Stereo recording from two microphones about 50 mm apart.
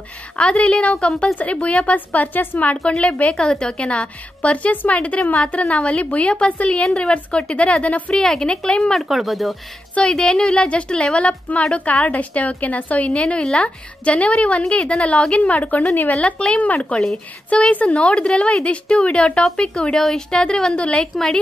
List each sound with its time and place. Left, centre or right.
0.4 s a woman's voice: left
2.0 s a woman's voice: left; by 8.9 s centre
9.1 s speech: centre
9.9 s a woman's voice: centre; by 16.2 s left
16.2 s a woman's voice: left